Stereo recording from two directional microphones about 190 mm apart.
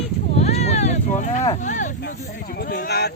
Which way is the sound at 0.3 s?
35° left (ahead or behind).